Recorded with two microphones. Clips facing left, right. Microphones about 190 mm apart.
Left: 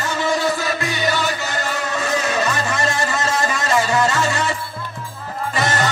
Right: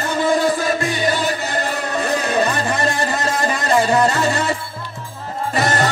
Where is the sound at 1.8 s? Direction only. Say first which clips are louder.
Right 2 dB; 60° right (ahead or behind).